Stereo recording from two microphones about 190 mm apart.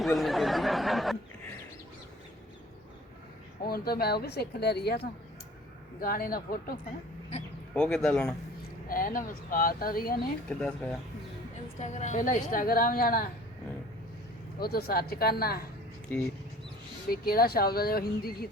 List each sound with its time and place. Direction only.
0.0 s a sound: centre (ahead or behind)
3.7 s speech: 55° left (ahead or behind)
7.8 s speech: 5° left (ahead or behind)
8.9 s speech: 45° left (ahead or behind)
10.5 s speech: 5° left (ahead or behind)
11.8 s speech: 40° left (ahead or behind)
14.6 s speech: 55° left (ahead or behind)
16.0 s speech: 5° left (ahead or behind)
17.1 s speech: 55° left (ahead or behind)